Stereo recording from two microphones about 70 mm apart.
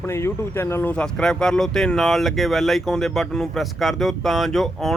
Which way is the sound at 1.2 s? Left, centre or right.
Centre.